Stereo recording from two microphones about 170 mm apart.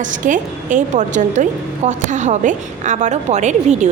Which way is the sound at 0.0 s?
50° right (ahead or behind).